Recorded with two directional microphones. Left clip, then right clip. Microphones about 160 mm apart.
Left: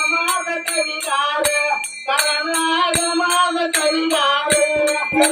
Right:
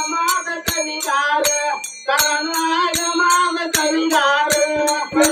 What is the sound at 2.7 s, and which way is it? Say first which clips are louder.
Music: left 1 dB; 20° right (ahead or behind).